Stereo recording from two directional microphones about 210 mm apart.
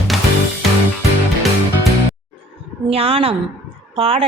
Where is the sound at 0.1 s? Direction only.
Centre (ahead or behind).